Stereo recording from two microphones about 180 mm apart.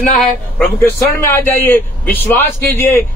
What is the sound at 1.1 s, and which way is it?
A man's voice, 15° left (ahead or behind).